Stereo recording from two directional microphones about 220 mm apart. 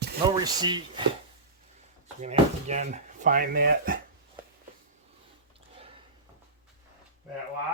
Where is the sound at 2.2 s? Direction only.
30° right (ahead or behind).